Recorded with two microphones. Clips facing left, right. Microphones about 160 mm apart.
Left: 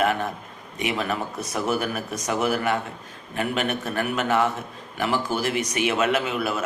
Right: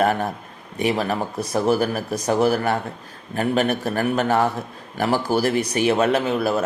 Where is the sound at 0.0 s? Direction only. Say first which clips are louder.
Right 3 dB; 40° right (ahead or behind).